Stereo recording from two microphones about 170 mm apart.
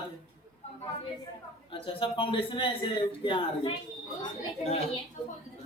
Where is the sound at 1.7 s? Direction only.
30° left (ahead or behind).